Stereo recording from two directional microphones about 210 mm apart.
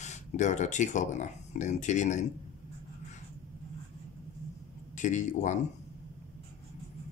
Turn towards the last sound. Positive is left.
turn(degrees=35)  # may be behind; listen again after turning